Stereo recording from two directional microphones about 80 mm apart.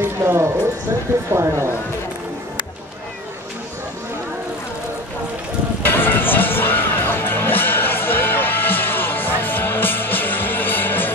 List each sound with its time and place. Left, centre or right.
0.0 s speech: right
5.9 s music: left